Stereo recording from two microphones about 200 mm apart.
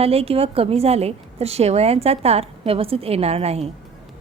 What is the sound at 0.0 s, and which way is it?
Speech, 30° right (ahead or behind).